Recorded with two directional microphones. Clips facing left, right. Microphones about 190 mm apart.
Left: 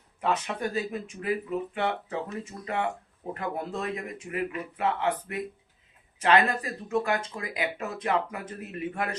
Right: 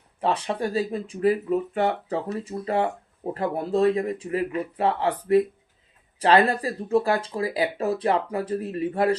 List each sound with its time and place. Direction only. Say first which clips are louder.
0.2 s speech: right 4 dB; 30° right (ahead or behind)